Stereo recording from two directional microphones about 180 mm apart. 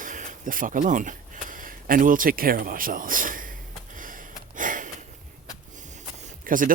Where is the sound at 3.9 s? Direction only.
50° right (ahead or behind).